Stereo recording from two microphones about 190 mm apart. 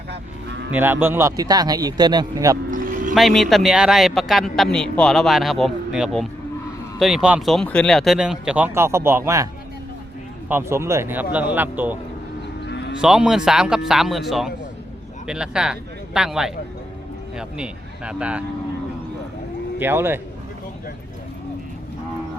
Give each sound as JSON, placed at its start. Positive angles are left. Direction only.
{"t": 0.7, "sound": "a man's voice", "side_deg": -10}
{"t": 2.6, "sound": "a sound", "side_deg": -45}
{"t": 3.2, "sound": "speech", "side_deg": 0}
{"t": 10.5, "sound": "speech", "side_deg": -15}
{"t": 13.0, "sound": "speech", "side_deg": -5}
{"t": 19.8, "sound": "speech", "side_deg": -10}